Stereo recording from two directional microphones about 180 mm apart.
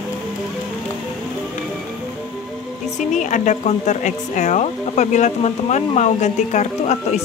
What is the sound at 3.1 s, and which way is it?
Speech, 45° left (ahead or behind).